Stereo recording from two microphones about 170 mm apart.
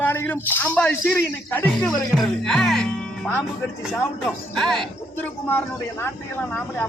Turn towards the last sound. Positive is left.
turn(degrees=10)  # may be behind; listen again after turning